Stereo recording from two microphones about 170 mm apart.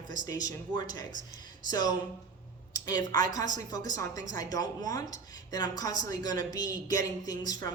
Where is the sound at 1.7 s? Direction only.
25° left (ahead or behind).